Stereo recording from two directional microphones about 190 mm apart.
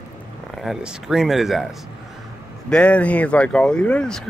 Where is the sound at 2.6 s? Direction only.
5° left (ahead or behind).